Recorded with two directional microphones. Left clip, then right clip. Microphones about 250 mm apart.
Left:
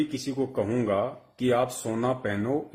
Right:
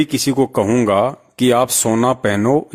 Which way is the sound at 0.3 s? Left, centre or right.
Right.